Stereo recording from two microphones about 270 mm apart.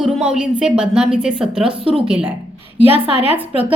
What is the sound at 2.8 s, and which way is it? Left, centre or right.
Speech, right.